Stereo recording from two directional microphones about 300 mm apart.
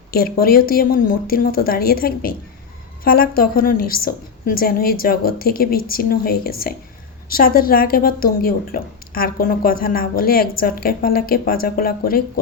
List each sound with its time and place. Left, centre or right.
0.1 s a woman's voice: left